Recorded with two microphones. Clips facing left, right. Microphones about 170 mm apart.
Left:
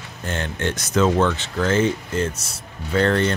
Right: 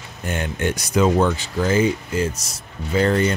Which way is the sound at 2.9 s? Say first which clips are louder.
Right 1 dB; 5° right (ahead or behind).